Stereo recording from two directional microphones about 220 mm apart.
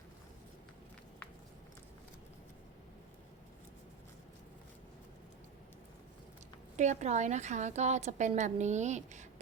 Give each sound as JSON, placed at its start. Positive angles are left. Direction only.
{"t": 6.7, "sound": "a woman's voice", "side_deg": -35}